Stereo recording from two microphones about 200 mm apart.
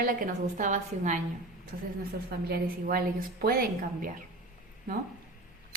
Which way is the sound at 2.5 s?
45° right (ahead or behind).